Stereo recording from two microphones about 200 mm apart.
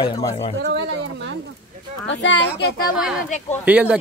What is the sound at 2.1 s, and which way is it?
Speech, 65° left (ahead or behind).